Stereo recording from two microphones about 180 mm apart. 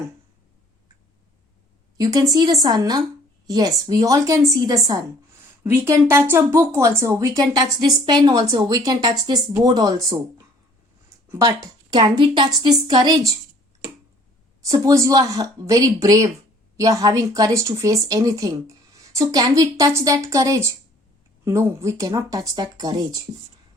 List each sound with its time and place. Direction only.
2.0 s a woman's voice: 20° right (ahead or behind)
14.6 s speech: 20° right (ahead or behind)